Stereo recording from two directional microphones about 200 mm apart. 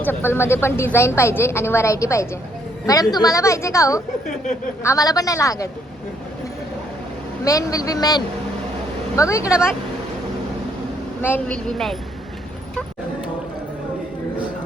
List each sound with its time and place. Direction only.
0.0 s a woman's voice: 10° left (ahead or behind)
7.4 s a woman's voice: 15° left (ahead or behind)
9.5 s speech: 5° right (ahead or behind)
11.3 s speech: 5° left (ahead or behind)